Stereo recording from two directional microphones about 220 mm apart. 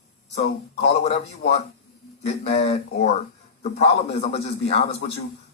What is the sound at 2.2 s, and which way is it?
Speech, 30° left (ahead or behind).